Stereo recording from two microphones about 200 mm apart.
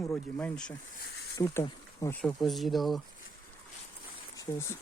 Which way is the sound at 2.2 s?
Centre (ahead or behind).